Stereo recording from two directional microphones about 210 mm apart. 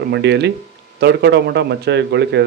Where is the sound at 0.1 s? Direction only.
55° right (ahead or behind).